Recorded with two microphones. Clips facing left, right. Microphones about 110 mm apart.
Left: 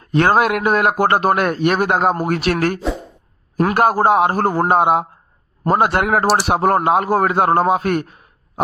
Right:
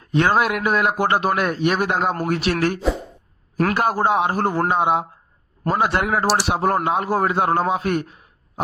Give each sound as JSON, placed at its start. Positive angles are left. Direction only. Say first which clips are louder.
{"t": 0.1, "sound": "a man's voice", "louder": "left 4 dB", "side_deg": 50}
{"t": 3.8, "sound": "a man's voice", "louder": "left 7 dB", "side_deg": 50}